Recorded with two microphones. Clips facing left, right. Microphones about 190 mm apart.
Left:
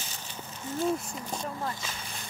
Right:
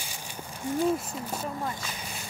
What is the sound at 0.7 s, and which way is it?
Speech, 10° right (ahead or behind).